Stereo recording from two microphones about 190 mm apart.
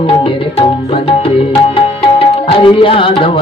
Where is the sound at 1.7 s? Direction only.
30° left (ahead or behind).